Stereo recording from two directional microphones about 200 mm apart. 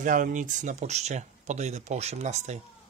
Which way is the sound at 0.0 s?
40° right (ahead or behind).